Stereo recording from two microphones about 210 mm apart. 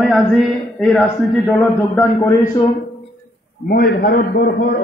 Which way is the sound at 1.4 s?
15° left (ahead or behind).